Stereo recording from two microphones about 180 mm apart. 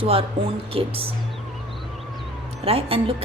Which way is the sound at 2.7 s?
30° right (ahead or behind).